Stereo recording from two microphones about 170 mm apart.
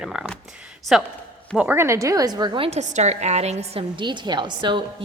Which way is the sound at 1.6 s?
15° right (ahead or behind).